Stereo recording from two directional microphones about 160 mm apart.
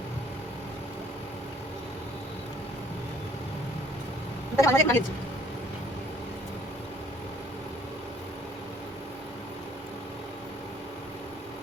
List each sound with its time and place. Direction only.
4.5 s a woman's voice: 20° left (ahead or behind)